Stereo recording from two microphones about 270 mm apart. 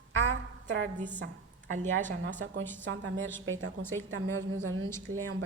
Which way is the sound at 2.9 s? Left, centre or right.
Right.